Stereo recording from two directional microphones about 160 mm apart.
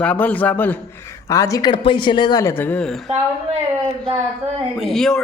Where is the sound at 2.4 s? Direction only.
15° left (ahead or behind).